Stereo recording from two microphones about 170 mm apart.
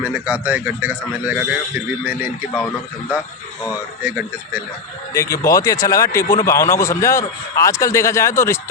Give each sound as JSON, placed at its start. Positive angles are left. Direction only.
{"t": 0.0, "sound": "speech", "side_deg": -10}
{"t": 2.6, "sound": "speech", "side_deg": 15}
{"t": 5.1, "sound": "speech", "side_deg": 20}